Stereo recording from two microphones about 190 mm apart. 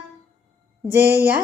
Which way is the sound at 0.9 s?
10° right (ahead or behind).